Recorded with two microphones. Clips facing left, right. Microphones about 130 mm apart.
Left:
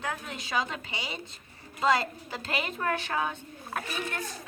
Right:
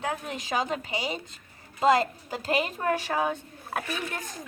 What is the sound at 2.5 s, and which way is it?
Speech, 40° right (ahead or behind).